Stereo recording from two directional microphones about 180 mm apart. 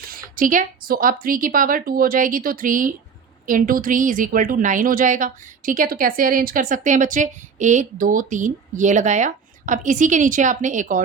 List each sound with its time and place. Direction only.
0.1 s a woman's voice: 50° right (ahead or behind)